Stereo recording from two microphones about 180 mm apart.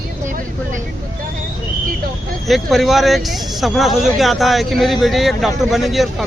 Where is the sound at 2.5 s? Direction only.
Centre (ahead or behind).